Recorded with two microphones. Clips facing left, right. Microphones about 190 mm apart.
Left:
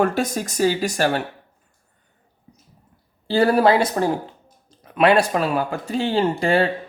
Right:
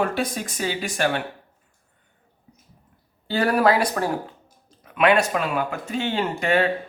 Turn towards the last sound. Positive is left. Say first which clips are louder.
# left 3 dB
turn(degrees=30)  # may be behind; listen again after turning